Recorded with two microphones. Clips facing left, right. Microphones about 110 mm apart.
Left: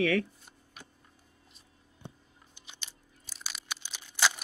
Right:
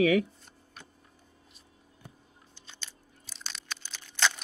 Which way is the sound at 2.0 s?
15° left (ahead or behind).